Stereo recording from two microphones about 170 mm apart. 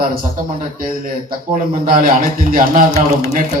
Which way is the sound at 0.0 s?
55° right (ahead or behind).